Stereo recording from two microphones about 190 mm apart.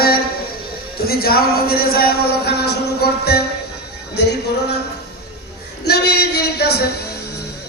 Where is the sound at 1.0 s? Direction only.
55° left (ahead or behind).